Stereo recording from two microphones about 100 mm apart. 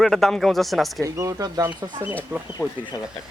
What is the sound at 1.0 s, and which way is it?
Speech, 30° right (ahead or behind).